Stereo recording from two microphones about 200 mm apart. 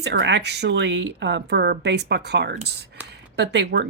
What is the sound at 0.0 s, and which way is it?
Speech, 60° right (ahead or behind).